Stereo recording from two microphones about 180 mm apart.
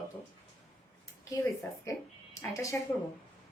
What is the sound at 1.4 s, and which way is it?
A woman's voice, 15° left (ahead or behind).